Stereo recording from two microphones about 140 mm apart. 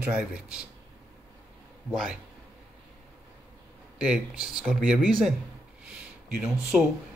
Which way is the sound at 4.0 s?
5° right (ahead or behind).